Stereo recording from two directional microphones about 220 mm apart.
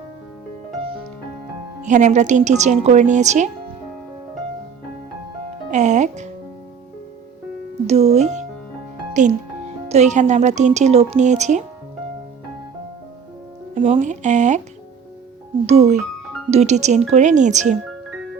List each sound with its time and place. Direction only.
1.8 s a woman's voice: 35° right (ahead or behind)
5.7 s music: 35° right (ahead or behind)
7.9 s music: 30° right (ahead or behind)
9.9 s a woman's voice: 30° right (ahead or behind)
13.7 s a woman's voice: 30° right (ahead or behind)
15.6 s a woman's voice: 30° right (ahead or behind)